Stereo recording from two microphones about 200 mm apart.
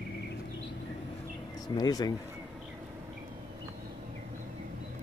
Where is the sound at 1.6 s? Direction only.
20° left (ahead or behind).